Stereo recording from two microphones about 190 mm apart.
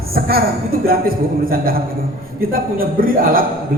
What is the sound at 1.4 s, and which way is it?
A man's voice, 50° right (ahead or behind).